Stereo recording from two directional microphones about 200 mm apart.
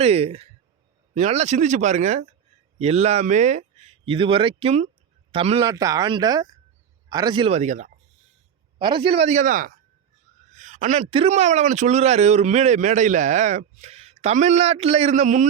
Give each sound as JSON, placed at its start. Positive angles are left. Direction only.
{"t": 0.0, "sound": "a man's voice", "side_deg": -30}
{"t": 8.8, "sound": "a man's voice", "side_deg": -25}